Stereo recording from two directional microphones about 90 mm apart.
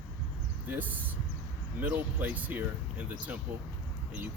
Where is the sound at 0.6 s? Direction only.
20° right (ahead or behind).